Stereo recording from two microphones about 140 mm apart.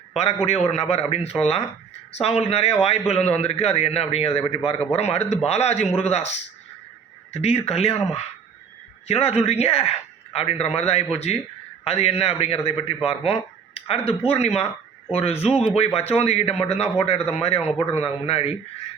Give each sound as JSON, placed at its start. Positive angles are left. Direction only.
{"t": 0.4, "sound": "a man's voice", "side_deg": 50}
{"t": 9.0, "sound": "a man's voice", "side_deg": 50}